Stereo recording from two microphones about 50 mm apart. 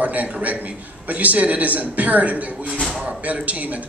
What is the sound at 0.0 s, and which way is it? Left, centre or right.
A man's voice, right.